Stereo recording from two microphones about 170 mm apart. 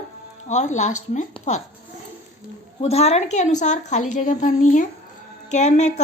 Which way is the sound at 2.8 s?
40° left (ahead or behind).